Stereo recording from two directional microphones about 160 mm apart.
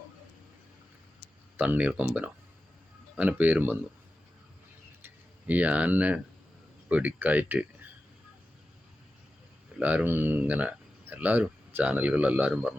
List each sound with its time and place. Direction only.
1.5 s speech: 10° right (ahead or behind)
5.0 s speech: 10° right (ahead or behind)
9.7 s speech: 10° right (ahead or behind)